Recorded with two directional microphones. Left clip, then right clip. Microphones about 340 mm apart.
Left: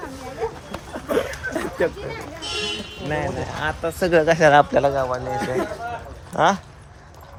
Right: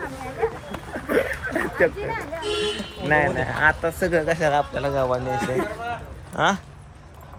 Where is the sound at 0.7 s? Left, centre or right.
Centre.